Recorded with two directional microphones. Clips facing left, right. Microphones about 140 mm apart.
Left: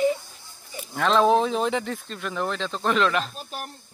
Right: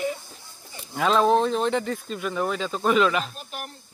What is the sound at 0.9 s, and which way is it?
Speech, 5° right (ahead or behind).